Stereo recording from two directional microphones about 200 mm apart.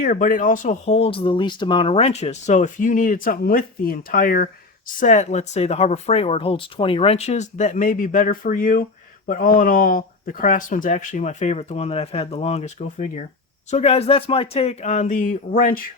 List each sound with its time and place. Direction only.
0.0 s speech: 40° left (ahead or behind)